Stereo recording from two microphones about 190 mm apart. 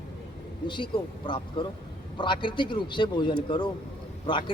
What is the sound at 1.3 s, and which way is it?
A man's voice, 25° left (ahead or behind).